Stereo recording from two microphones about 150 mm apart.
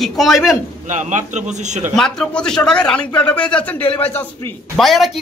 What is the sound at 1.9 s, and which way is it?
A man's voice, 5° left (ahead or behind).